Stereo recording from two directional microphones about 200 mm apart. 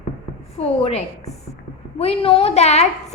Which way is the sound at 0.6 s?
30° left (ahead or behind).